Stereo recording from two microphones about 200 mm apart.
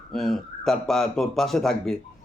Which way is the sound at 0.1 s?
Centre (ahead or behind).